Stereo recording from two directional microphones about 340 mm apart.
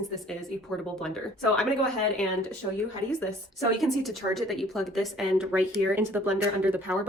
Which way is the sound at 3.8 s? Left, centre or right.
Centre.